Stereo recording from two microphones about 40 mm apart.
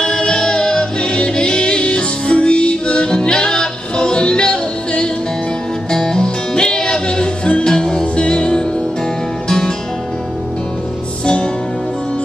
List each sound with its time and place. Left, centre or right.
0.0 s music: left
11.2 s music: left